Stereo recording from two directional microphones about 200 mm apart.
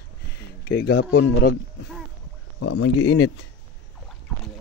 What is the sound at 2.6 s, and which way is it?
Speech, 80° left.